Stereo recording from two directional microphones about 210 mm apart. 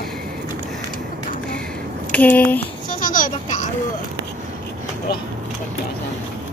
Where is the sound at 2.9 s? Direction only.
40° left (ahead or behind).